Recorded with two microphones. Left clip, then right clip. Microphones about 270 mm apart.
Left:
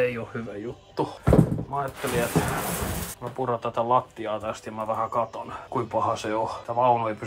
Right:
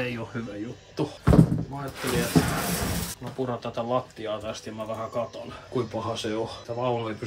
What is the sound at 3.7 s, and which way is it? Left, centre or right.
Speech, left.